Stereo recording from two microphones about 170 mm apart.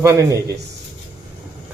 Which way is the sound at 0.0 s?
20° right (ahead or behind).